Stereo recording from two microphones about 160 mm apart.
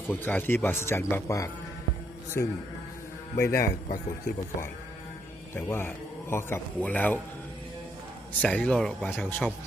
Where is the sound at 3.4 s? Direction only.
15° left (ahead or behind).